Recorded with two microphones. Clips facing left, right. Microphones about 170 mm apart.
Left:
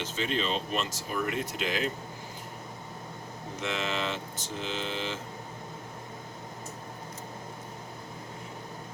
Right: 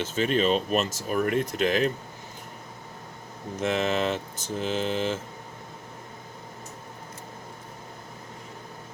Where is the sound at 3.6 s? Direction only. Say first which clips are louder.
Right 7 dB; 45° right (ahead or behind).